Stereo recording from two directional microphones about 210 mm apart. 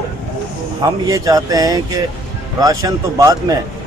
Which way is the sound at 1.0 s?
15° right (ahead or behind).